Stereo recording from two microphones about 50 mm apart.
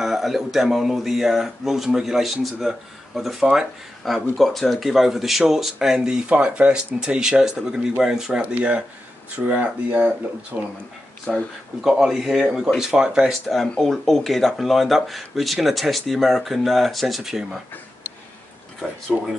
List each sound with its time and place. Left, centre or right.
0.0 s speech: centre
3.2 s speech: centre
5.9 s speech: centre
11.3 s speech: centre
13.3 s speech: centre
19.1 s speech: centre